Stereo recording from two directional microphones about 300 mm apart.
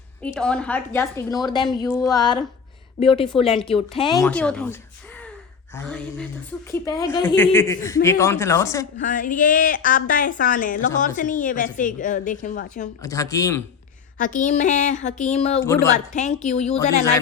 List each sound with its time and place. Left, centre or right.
0.2 s a woman's voice: centre
4.2 s a woman's voice: centre
9.0 s a woman's voice: left
13.0 s a woman's voice: centre
14.2 s a woman's voice: left
15.6 s a woman's voice: centre
16.1 s a woman's voice: left